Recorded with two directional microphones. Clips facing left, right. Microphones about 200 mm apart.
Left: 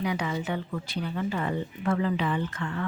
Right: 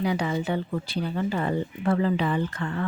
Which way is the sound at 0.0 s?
30° right (ahead or behind).